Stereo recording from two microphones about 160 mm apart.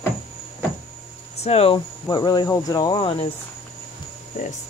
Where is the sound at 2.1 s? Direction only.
25° left (ahead or behind).